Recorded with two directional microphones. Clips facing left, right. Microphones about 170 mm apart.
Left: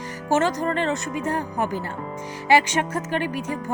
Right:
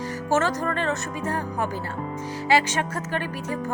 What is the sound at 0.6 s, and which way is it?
Speech, 25° left (ahead or behind).